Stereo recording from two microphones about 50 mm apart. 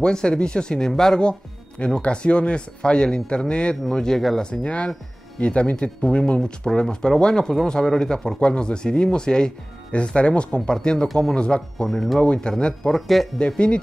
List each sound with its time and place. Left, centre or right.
0.0 s speech: centre
12.9 s speech: centre
13.6 s speech: left